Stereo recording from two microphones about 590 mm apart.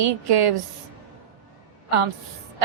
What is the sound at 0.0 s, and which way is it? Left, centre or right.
Speech, right.